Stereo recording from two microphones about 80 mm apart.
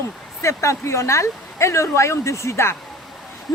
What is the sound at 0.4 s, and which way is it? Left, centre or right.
Speech, left.